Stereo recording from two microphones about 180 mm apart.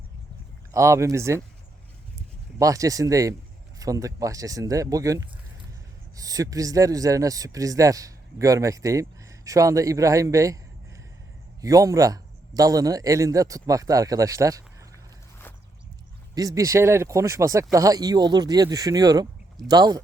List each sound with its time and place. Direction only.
0.7 s speech: 15° right (ahead or behind)
2.6 s speech: 20° right (ahead or behind)
11.6 s speech: 20° right (ahead or behind)
16.3 s speech: 20° right (ahead or behind)